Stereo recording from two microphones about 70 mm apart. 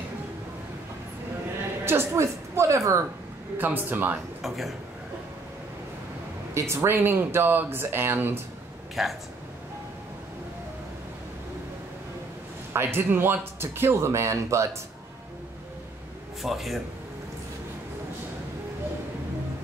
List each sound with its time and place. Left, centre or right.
1.9 s a woman's voice: right
3.5 s speech: right
4.4 s speech: centre
6.5 s speech: right
9.0 s speech: centre
12.7 s speech: right
16.4 s speech: centre